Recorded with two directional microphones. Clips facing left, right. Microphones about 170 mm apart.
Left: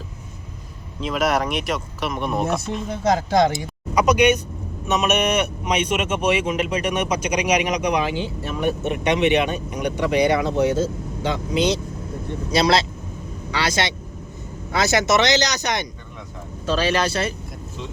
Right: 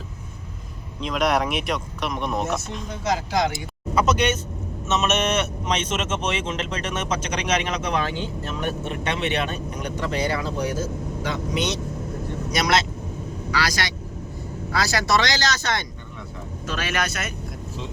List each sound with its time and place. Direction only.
1.0 s speech: 5° left (ahead or behind)
2.9 s speech: 50° left (ahead or behind)
3.9 s speech: 15° left (ahead or behind)
16.6 s speech: 30° left (ahead or behind)